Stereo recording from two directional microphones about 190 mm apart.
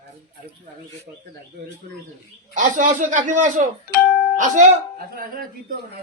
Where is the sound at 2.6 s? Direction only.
40° right (ahead or behind).